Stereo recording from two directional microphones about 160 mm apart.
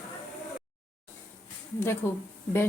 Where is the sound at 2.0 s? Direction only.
15° left (ahead or behind).